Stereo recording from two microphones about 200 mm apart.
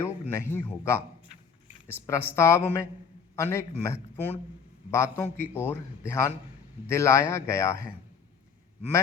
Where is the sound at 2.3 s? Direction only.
10° left (ahead or behind).